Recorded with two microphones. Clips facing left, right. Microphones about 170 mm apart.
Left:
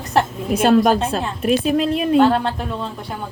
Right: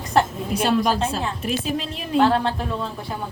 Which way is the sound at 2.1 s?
Centre (ahead or behind).